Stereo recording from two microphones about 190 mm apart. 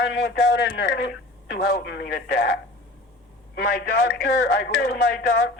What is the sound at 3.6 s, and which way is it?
Speech, 55° left (ahead or behind).